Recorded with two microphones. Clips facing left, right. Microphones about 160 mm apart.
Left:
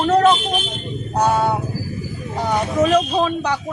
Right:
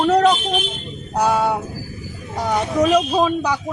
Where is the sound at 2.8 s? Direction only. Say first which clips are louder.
Right 1 dB; 10° right (ahead or behind).